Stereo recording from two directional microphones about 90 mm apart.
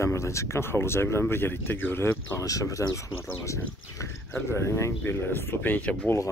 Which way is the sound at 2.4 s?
40° left (ahead or behind).